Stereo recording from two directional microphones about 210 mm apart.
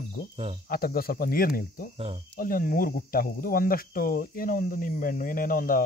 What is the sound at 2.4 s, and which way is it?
Speech, 40° left (ahead or behind).